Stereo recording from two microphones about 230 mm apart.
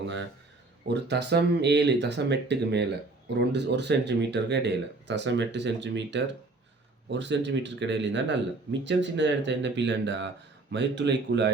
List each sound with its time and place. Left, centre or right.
0.9 s speech: right